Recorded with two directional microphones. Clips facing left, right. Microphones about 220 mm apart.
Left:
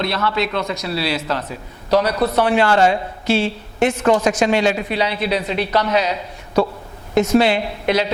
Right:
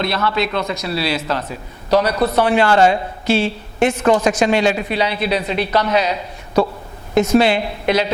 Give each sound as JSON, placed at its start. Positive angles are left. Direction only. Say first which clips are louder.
{"t": 0.3, "sound": "a woman's voice", "louder": "right 1 dB", "side_deg": -15}